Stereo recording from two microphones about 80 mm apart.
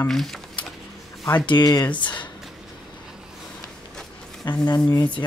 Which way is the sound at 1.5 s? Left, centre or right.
Left.